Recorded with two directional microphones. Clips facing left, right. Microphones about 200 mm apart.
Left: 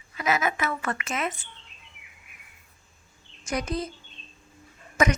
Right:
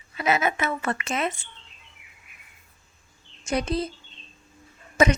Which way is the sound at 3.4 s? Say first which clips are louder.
Right 3 dB; 30° right (ahead or behind).